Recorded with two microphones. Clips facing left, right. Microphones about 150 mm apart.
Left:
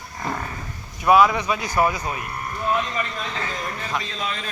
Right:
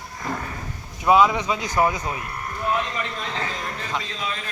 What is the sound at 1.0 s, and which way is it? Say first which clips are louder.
A man's voice: left 1 dB; 20° right (ahead or behind).